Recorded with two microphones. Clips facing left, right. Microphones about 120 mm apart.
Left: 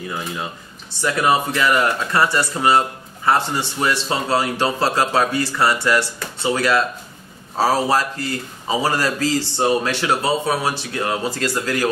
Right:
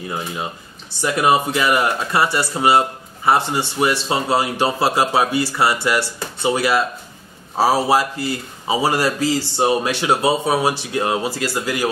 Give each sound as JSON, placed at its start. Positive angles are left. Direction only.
{"t": 1.0, "sound": "a man's voice", "side_deg": -20}
{"t": 11.2, "sound": "a man's voice", "side_deg": -10}